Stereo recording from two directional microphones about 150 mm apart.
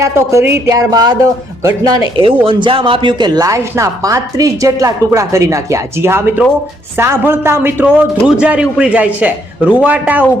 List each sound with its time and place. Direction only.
0.0 s a man's voice: 20° right (ahead or behind)